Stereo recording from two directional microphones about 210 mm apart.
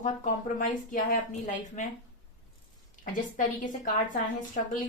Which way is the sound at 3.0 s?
35° left (ahead or behind).